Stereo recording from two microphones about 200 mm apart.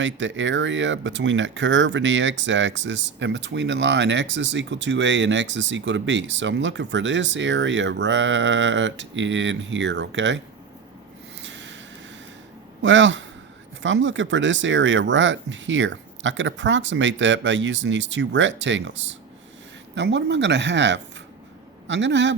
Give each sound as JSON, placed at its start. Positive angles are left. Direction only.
{"t": 0.0, "sound": "speech", "side_deg": -65}
{"t": 11.4, "sound": "a sound", "side_deg": -65}
{"t": 12.8, "sound": "speech", "side_deg": -65}